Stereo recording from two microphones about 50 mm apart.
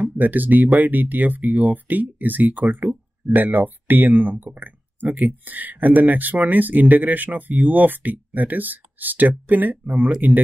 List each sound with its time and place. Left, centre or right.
0.0 s speech: right